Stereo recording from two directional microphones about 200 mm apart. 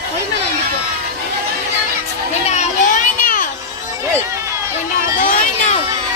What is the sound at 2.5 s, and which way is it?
Children playing, 35° left (ahead or behind).